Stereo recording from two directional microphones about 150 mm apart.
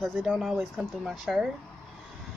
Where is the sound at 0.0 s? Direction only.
5° right (ahead or behind).